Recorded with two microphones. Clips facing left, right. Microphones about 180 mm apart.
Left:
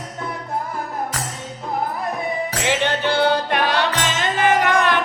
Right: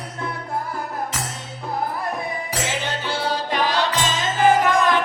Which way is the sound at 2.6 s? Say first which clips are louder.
Left 7 dB; 65° left (ahead or behind).